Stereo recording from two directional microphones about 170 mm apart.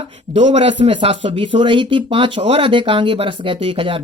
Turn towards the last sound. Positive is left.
turn(degrees=-30)  # may be behind; listen again after turning